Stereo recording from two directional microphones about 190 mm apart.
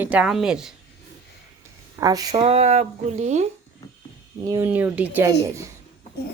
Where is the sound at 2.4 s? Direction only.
35° right (ahead or behind).